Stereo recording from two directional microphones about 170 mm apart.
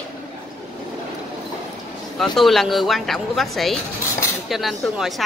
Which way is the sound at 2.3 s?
Centre (ahead or behind).